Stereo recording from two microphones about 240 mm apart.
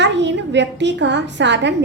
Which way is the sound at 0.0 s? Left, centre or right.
Right.